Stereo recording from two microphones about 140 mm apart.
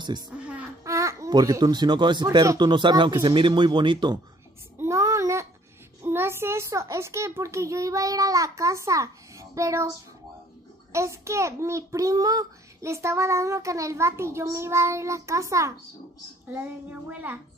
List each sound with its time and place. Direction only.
0.3 s speech: 10° right (ahead or behind)
0.8 s speech: 20° right (ahead or behind)
4.7 s child singing: 20° right (ahead or behind)
6.0 s a child's voice: 15° right (ahead or behind)
10.9 s a child's voice: 20° right (ahead or behind)
16.5 s child singing: 15° right (ahead or behind)